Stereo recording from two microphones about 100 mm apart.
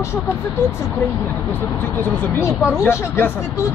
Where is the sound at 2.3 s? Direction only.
25° left (ahead or behind).